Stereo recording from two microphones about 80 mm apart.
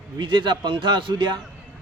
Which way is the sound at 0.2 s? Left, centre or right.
Right.